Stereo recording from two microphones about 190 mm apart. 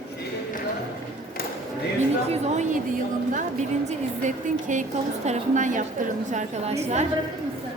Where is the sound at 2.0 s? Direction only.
35° right (ahead or behind).